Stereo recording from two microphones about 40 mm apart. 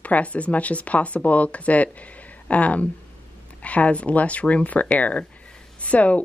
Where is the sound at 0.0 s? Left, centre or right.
Left.